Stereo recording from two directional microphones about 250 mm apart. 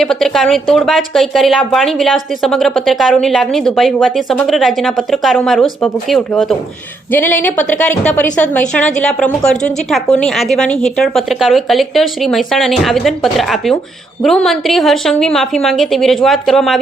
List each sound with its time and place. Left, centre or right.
0.0 s a woman's voice: centre